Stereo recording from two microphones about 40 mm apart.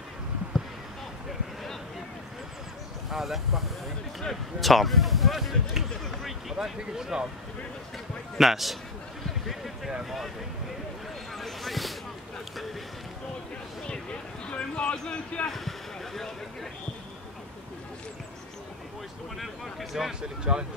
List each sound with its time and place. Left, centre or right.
3.1 s speech: centre
6.6 s speech: centre
8.4 s speech: centre
10.0 s speech: centre
11.3 s a sound: centre
14.5 s speech: left
15.4 s a sound: centre
19.3 s speech: centre
20.2 s speech: right